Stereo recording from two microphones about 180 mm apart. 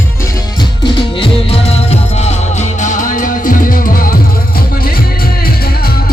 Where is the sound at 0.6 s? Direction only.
25° left (ahead or behind); by 6.0 s 60° left (ahead or behind).